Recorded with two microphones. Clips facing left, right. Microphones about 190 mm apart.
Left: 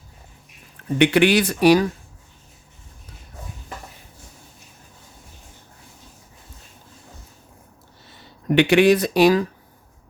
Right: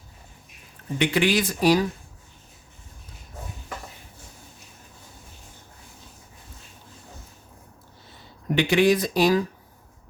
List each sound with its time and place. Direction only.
0.9 s speech: 65° left (ahead or behind)
8.0 s speech: 70° left (ahead or behind)